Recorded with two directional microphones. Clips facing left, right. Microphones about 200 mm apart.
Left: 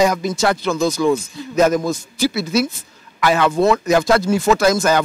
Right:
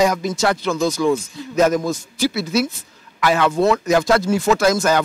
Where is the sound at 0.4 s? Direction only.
15° left (ahead or behind).